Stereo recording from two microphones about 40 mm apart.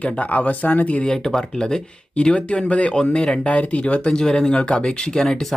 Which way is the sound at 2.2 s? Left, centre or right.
Left.